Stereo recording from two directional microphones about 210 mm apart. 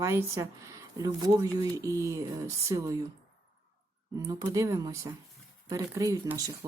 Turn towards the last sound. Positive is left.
turn(degrees=-15)  # may be behind; listen again after turning